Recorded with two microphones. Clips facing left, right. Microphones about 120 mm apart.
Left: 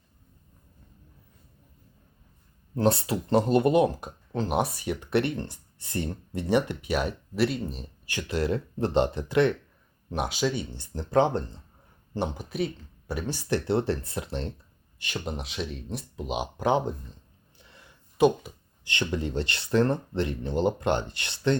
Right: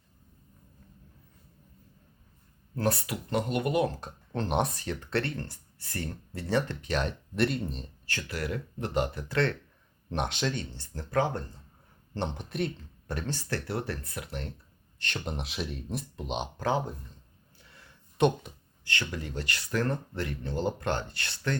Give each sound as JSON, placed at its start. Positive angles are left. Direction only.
{"t": 2.7, "sound": "speech", "side_deg": 25}
{"t": 4.0, "sound": "speech", "side_deg": 5}
{"t": 8.0, "sound": "speech", "side_deg": 15}
{"t": 10.1, "sound": "speech", "side_deg": 5}
{"t": 11.1, "sound": "speech", "side_deg": 25}
{"t": 12.1, "sound": "speech", "side_deg": 5}
{"t": 13.7, "sound": "speech", "side_deg": 25}
{"t": 14.9, "sound": "speech", "side_deg": 10}
{"t": 17.6, "sound": "a sound", "side_deg": 20}
{"t": 18.2, "sound": "speech", "side_deg": 5}
{"t": 18.9, "sound": "speech", "side_deg": 20}